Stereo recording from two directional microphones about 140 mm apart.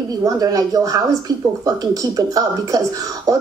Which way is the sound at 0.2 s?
25° right (ahead or behind).